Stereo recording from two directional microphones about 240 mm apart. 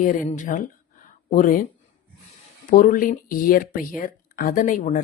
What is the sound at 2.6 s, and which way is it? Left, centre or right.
Speech, left.